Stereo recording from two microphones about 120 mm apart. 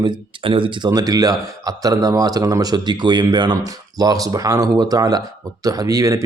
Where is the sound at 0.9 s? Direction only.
30° right (ahead or behind).